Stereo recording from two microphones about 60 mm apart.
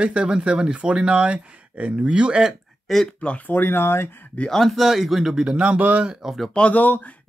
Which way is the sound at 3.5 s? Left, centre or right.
Left.